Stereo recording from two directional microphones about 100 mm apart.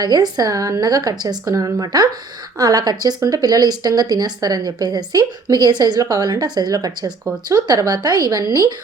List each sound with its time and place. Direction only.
0.0 s speech: 40° right (ahead or behind)